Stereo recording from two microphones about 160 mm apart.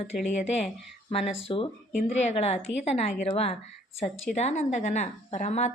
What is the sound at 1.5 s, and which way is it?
Speech, 30° left (ahead or behind).